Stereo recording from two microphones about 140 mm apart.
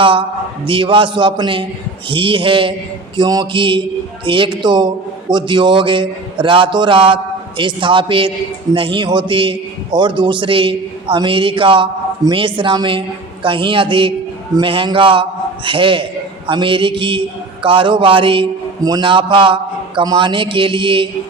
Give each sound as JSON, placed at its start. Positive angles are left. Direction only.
{"t": 0.0, "sound": "a man's voice", "side_deg": -40}